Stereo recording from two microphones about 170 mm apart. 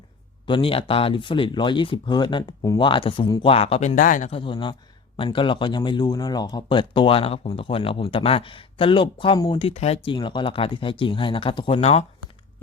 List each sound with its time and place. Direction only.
0.4 s speech: 30° left (ahead or behind); by 4.3 s 50° left (ahead or behind)
4.3 s speech: 30° left (ahead or behind)